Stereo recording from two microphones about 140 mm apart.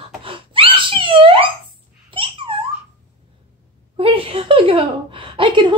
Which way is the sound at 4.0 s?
40° right (ahead or behind).